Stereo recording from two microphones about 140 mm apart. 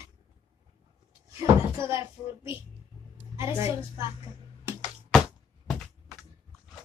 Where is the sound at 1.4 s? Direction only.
20° right (ahead or behind).